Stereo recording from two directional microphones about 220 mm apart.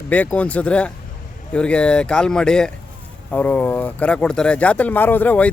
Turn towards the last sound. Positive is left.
turn(degrees=5)  # may be behind; listen again after turning